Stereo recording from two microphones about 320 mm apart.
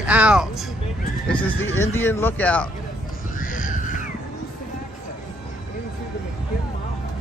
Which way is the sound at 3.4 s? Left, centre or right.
Left.